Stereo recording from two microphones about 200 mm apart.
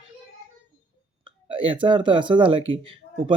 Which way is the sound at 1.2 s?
25° right (ahead or behind).